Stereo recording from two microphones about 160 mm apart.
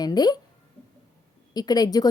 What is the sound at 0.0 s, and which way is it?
Speech, 25° left (ahead or behind).